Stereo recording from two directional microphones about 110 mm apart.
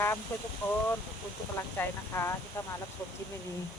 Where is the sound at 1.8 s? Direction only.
20° left (ahead or behind).